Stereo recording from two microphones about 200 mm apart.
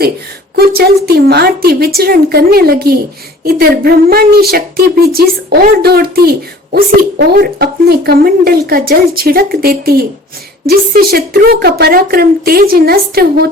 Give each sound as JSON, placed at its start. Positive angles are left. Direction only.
{"t": 1.0, "sound": "speech", "side_deg": -50}